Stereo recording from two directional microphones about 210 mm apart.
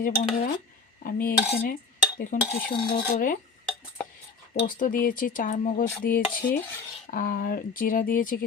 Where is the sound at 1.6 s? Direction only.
40° left (ahead or behind).